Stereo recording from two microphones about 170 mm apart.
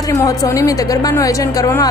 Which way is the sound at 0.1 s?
20° left (ahead or behind).